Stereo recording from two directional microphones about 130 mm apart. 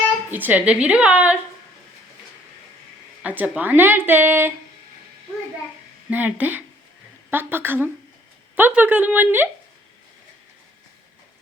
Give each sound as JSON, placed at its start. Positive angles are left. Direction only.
{"t": 0.3, "sound": "speech", "side_deg": -15}
{"t": 3.2, "sound": "speech", "side_deg": -10}
{"t": 6.1, "sound": "speech", "side_deg": -10}